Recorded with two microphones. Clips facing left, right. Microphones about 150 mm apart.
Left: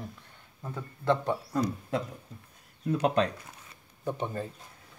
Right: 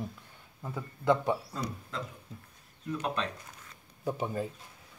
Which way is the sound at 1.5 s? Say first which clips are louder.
Left 9 dB; 55° left (ahead or behind).